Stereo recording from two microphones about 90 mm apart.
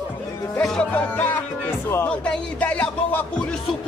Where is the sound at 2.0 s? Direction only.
15° left (ahead or behind).